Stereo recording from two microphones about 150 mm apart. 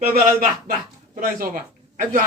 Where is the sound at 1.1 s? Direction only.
65° right (ahead or behind).